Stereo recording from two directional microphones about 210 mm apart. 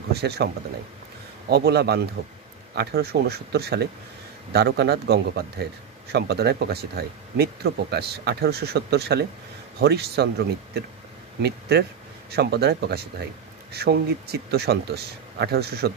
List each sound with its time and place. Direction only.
0.1 s speech: 50° right (ahead or behind)
1.5 s speech: 50° right (ahead or behind)
12.3 s speech: 50° right (ahead or behind)